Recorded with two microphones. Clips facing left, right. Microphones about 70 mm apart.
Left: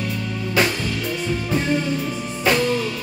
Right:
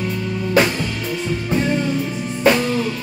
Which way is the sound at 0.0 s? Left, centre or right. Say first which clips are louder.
Right 3 dB; centre.